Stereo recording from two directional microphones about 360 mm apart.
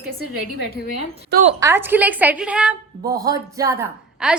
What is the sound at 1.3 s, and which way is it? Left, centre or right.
Speech, right.